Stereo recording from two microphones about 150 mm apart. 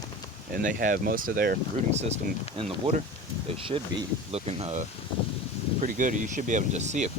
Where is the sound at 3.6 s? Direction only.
35° right (ahead or behind).